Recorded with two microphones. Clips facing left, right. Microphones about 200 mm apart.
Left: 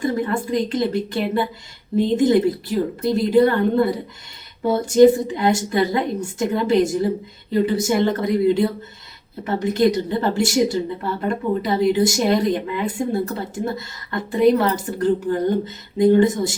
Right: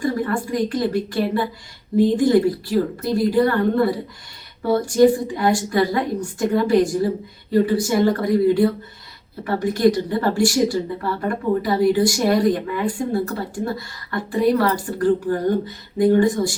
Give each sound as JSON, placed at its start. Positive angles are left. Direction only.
{"t": 0.0, "sound": "a woman's voice", "side_deg": 20}